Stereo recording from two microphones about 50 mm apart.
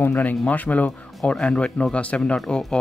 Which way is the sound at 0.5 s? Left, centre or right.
Left.